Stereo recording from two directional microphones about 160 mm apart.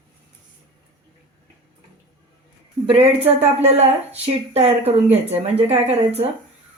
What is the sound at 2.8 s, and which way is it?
Speech, 40° right (ahead or behind).